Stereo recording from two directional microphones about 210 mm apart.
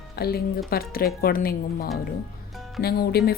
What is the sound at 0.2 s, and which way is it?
Speech, 50° left (ahead or behind).